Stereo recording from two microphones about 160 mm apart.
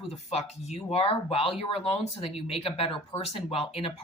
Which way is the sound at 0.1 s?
40° left (ahead or behind).